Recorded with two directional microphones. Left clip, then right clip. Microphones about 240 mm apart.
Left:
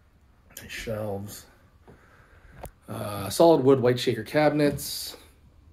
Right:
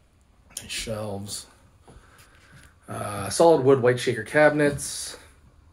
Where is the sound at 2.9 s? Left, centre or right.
Centre.